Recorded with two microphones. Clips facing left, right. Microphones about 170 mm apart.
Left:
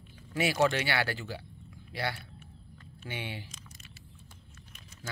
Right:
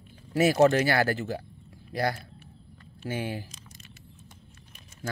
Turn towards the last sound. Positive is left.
turn(degrees=-40)  # may be behind; listen again after turning